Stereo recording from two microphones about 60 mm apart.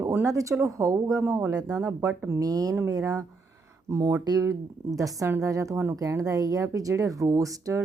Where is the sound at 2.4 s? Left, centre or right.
Right.